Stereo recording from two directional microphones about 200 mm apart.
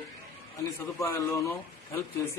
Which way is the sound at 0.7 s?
15° left (ahead or behind).